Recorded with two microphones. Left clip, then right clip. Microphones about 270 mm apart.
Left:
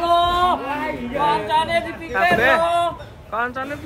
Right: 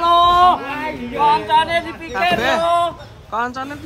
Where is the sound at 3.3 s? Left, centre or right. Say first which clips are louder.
Right 1 dB; centre.